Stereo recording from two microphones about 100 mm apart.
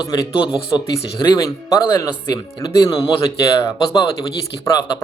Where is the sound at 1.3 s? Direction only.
35° left (ahead or behind).